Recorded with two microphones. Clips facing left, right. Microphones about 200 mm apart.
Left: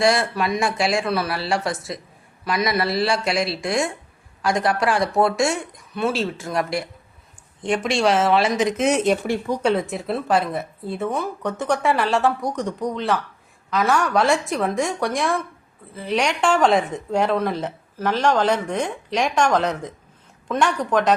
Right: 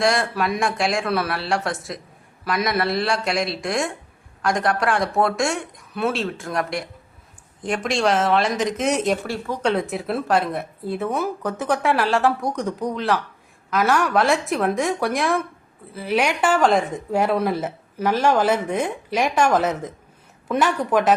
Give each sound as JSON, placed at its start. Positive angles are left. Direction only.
{"t": 0.0, "sound": "a woman's voice", "side_deg": 0}
{"t": 9.2, "sound": "speech", "side_deg": 15}
{"t": 9.6, "sound": "a woman's voice", "side_deg": 0}